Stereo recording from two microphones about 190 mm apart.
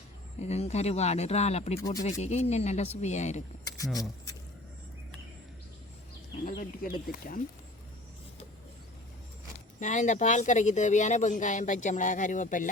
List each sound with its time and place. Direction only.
0.3 s speech: 35° left (ahead or behind)
6.4 s speech: 50° left (ahead or behind)
9.8 s speech: 40° left (ahead or behind)